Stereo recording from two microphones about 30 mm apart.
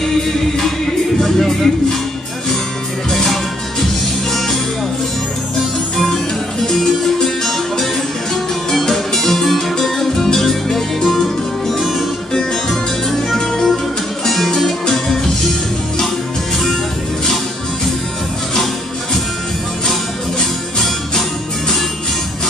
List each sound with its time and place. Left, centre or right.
1.2 s speech: centre
3.1 s music: centre
6.8 s music: centre
12.6 s music: centre